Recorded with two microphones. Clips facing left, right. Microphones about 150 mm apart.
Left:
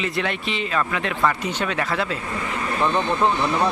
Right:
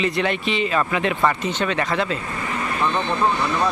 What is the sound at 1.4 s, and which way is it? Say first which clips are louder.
Speech: right 2 dB; 10° left (ahead or behind).